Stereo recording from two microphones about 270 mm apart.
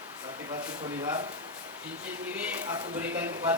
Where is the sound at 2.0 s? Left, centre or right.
Centre.